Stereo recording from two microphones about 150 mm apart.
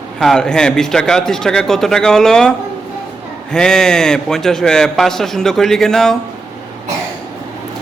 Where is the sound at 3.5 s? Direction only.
5° left (ahead or behind).